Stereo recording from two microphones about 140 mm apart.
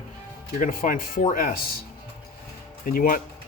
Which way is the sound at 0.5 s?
70° left (ahead or behind).